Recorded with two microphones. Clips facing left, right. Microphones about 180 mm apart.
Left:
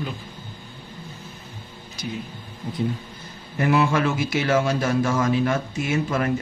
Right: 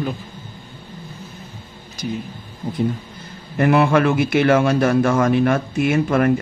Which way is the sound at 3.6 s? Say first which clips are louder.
Right 5 dB; 60° right (ahead or behind).